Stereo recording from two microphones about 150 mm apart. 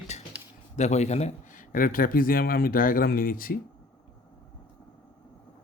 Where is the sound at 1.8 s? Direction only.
70° left (ahead or behind).